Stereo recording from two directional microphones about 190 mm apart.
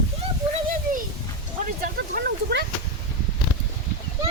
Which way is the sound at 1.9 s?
60° right (ahead or behind).